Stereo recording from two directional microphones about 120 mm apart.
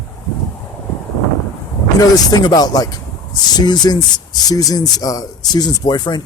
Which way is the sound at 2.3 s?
35° left (ahead or behind).